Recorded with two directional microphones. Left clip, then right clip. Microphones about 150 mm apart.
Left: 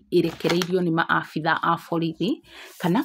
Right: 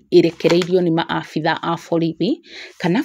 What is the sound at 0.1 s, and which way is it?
Speech, 35° right (ahead or behind).